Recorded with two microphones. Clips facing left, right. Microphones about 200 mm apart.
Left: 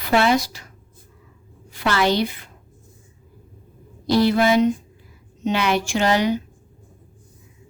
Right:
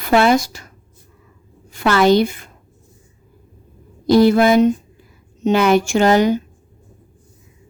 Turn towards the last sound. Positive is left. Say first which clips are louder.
# right 6 dB
turn(degrees=-45)  # may be behind; listen again after turning